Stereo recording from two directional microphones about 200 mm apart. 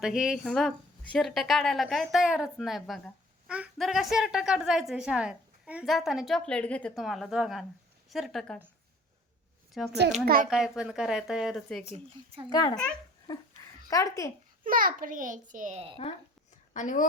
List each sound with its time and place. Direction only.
0.0 s a woman's voice: 5° right (ahead or behind)
9.7 s a woman's voice: centre (ahead or behind)
10.2 s a child's voice: 45° right (ahead or behind)
10.5 s a woman's voice: 5° right (ahead or behind)
12.5 s a child's voice: 20° left (ahead or behind)
13.9 s a child's voice: 15° left (ahead or behind)
14.6 s a child's voice: 45° right (ahead or behind)
16.7 s a woman's voice: 40° left (ahead or behind)